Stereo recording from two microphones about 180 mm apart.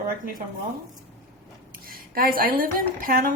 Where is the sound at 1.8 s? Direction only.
55° right (ahead or behind).